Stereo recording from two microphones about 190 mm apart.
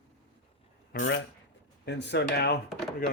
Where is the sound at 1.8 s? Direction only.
65° left (ahead or behind).